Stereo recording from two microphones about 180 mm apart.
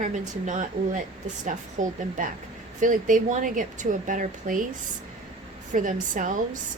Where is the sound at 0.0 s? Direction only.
45° right (ahead or behind).